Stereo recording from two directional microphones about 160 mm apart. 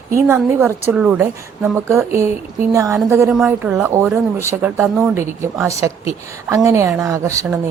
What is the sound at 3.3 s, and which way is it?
A woman's voice, 5° right (ahead or behind).